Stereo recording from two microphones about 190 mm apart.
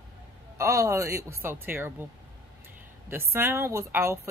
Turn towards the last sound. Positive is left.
turn(degrees=-15)  # may be behind; listen again after turning